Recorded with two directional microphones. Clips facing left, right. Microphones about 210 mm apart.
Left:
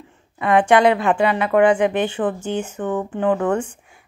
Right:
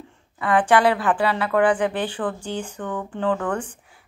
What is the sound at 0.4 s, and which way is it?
A woman's voice, 25° left (ahead or behind).